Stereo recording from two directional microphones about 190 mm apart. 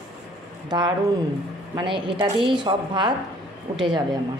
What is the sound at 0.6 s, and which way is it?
A woman's voice, 20° right (ahead or behind).